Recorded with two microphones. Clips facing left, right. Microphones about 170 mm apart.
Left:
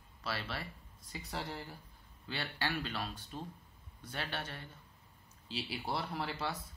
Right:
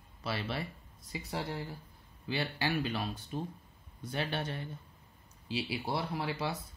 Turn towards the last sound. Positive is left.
turn(degrees=-10)  # may be behind; listen again after turning